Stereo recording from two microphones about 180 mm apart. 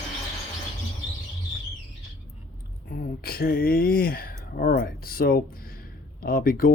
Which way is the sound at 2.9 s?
55° left (ahead or behind).